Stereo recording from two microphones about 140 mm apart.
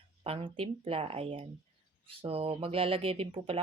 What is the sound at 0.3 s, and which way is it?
Speech, 40° right (ahead or behind).